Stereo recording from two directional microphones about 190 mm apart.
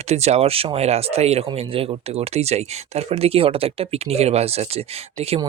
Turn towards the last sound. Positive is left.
turn(degrees=-35)  # may be behind; listen again after turning